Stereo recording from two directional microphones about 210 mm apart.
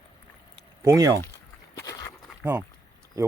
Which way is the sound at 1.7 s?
15° left (ahead or behind).